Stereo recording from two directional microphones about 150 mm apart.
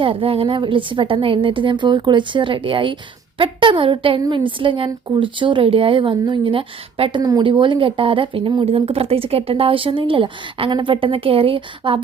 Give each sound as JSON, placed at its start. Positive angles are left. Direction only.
{"t": 0.0, "sound": "speech", "side_deg": -40}